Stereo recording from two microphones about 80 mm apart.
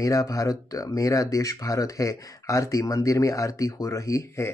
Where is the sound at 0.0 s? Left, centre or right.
Left.